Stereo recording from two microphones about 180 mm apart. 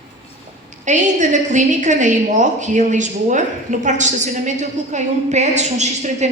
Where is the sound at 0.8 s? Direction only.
40° right (ahead or behind).